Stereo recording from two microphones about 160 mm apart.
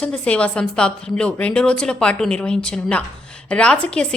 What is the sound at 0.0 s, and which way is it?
A woman's voice, 5° left (ahead or behind).